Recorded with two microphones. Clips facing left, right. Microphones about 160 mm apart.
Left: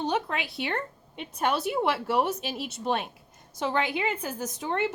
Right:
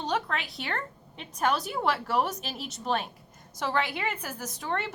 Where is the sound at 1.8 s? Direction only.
20° left (ahead or behind).